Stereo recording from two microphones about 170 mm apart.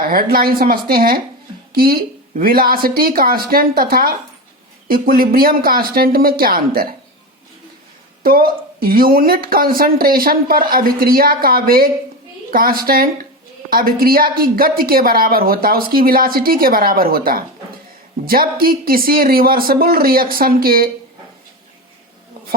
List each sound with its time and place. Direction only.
0.1 s a woman's voice: 60° right (ahead or behind)
8.2 s a woman's voice: 60° right (ahead or behind)